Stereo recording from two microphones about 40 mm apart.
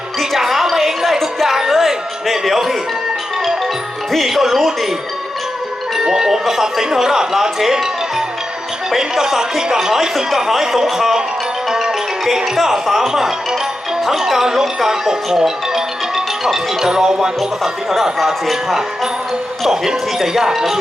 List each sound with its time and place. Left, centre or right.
0.2 s music: centre
2.4 s speech: centre
4.1 s speech: centre
6.1 s music: centre
6.4 s speech: centre
19.6 s speech: centre